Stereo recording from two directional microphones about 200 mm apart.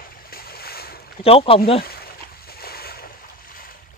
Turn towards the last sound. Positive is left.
turn(degrees=45)  # may be behind; listen again after turning